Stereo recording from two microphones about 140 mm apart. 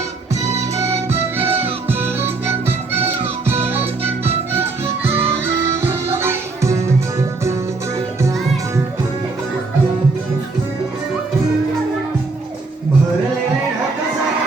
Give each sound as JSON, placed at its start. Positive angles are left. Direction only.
{"t": 0.5, "sound": "music", "side_deg": -20}